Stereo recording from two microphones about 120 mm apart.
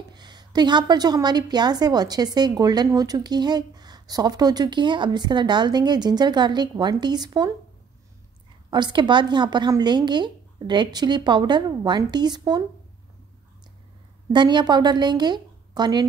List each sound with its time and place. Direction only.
0.1 s a woman's voice: 35° right (ahead or behind)
8.6 s a woman's voice: 40° right (ahead or behind)
14.3 s a woman's voice: 40° right (ahead or behind)